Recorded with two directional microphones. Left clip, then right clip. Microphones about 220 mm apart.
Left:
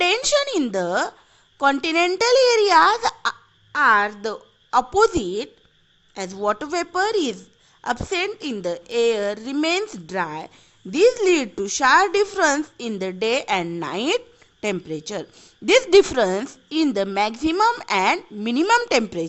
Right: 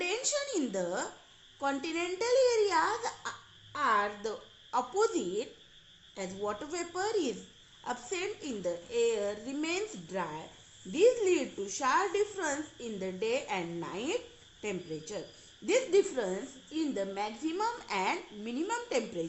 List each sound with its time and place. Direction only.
0.0 s a woman's voice: 45° left (ahead or behind)